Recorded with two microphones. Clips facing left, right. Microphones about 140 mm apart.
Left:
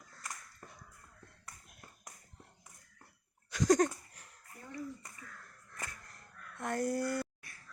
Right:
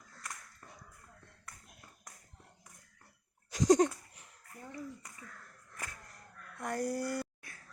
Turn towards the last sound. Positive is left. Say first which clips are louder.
# left 1 dB
turn(degrees=-10)  # may be behind; listen again after turning